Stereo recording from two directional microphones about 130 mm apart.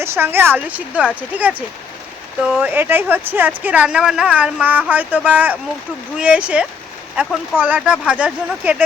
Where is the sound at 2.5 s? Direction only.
15° right (ahead or behind).